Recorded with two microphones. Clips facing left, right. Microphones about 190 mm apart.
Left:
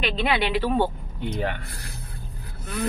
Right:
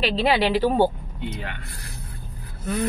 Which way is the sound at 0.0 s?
35° right (ahead or behind).